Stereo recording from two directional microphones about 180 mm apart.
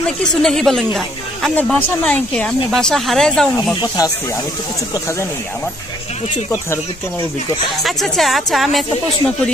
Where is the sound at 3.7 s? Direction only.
20° left (ahead or behind).